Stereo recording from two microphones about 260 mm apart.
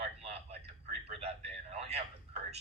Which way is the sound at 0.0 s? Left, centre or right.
Right.